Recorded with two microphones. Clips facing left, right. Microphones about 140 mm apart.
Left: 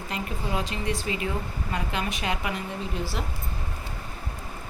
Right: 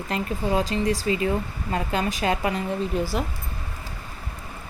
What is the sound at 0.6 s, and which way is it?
A woman's voice, 40° right (ahead or behind).